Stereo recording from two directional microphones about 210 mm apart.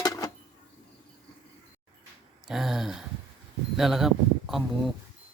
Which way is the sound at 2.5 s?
Centre (ahead or behind).